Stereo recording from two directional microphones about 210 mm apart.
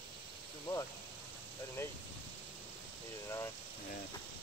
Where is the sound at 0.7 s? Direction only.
10° left (ahead or behind).